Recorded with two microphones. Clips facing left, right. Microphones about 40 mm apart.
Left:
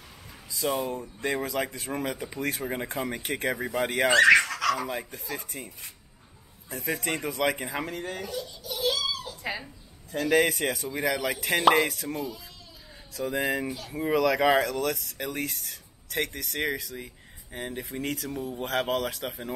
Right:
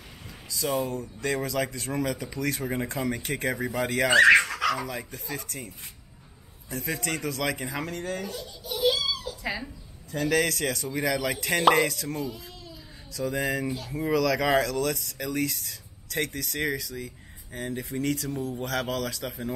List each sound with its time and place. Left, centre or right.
0.7 s speech: centre
0.9 s speech: left
4.1 s a sound: centre
5.1 s speech: centre
6.7 s speech: centre
8.4 s a sound: centre
9.4 s dog: centre
10.3 s speech: centre
13.7 s speech: centre
14.1 s speech: left
18.0 s speech: left
18.3 s speech: centre
18.6 s speech: left